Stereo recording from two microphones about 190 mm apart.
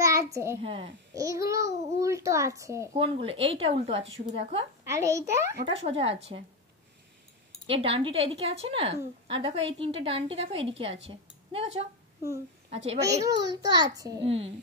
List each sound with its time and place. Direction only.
0.0 s a sound: 15° right (ahead or behind)
0.6 s a child's voice: 30° right (ahead or behind)
1.1 s a child's voice: 15° right (ahead or behind)
3.0 s a woman's voice: 30° right (ahead or behind)
4.8 s a child's voice: 15° right (ahead or behind)
5.7 s a woman's voice: 30° right (ahead or behind)
7.6 s a woman's voice: 30° right (ahead or behind)
13.0 s a child's voice: 15° right (ahead or behind)
14.2 s a woman's voice: 30° right (ahead or behind)